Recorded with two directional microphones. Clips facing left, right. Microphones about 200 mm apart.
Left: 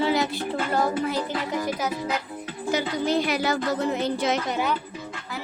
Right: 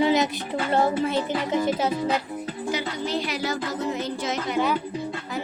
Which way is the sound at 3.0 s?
50° left (ahead or behind).